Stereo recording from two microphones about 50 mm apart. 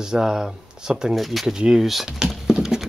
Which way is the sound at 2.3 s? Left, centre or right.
Centre.